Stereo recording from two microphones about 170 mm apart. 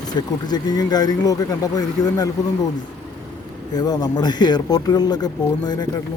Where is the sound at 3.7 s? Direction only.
25° left (ahead or behind).